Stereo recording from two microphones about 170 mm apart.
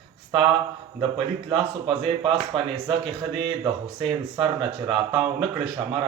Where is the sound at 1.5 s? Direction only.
30° right (ahead or behind).